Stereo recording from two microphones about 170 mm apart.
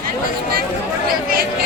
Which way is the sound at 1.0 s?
60° right (ahead or behind).